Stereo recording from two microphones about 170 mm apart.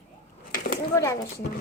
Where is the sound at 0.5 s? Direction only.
55° left (ahead or behind).